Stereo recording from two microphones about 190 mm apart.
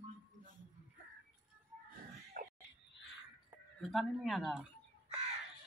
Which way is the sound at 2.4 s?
50° right (ahead or behind).